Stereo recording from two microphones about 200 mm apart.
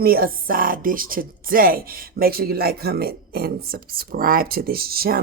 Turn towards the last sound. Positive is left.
turn(degrees=-50)  # may be behind; listen again after turning